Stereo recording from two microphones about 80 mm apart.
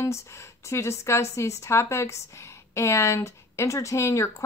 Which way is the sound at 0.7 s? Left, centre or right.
Left.